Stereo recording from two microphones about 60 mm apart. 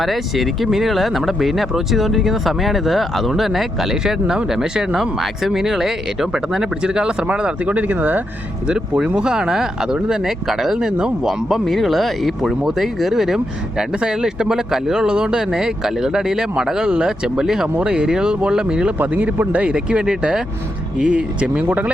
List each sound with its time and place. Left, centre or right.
0.0 s speech: centre; by 8.2 s right
8.6 s speech: centre
18.9 s speech: right